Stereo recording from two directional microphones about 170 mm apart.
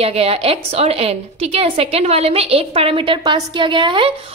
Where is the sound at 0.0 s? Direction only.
35° right (ahead or behind).